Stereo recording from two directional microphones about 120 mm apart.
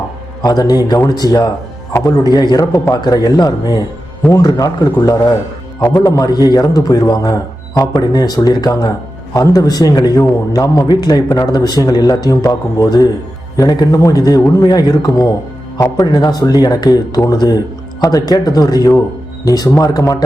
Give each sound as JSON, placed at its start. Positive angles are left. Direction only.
{"t": 0.8, "sound": "a man's voice", "side_deg": 30}